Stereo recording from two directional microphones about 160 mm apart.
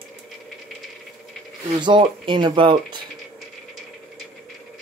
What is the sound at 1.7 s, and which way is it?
Speech, 30° right (ahead or behind).